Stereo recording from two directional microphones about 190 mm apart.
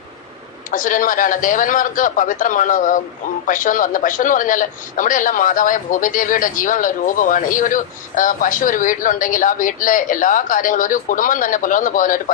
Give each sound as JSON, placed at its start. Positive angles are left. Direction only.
{"t": 0.7, "sound": "a man's voice", "side_deg": 45}